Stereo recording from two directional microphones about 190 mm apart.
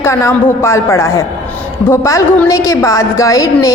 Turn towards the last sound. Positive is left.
turn(degrees=15)  # may be behind; listen again after turning